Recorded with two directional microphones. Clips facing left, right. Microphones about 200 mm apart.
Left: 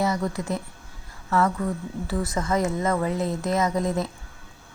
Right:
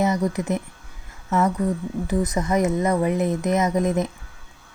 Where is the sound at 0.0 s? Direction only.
20° right (ahead or behind).